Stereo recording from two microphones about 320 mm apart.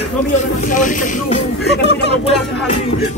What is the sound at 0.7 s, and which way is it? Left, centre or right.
Speech, left.